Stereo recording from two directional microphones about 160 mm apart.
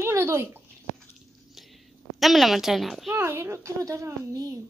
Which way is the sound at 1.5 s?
Centre (ahead or behind).